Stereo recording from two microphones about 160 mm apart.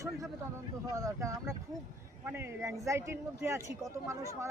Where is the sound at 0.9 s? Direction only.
20° right (ahead or behind).